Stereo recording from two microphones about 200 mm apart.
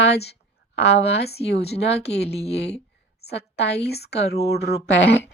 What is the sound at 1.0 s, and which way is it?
A woman's voice, 55° left (ahead or behind).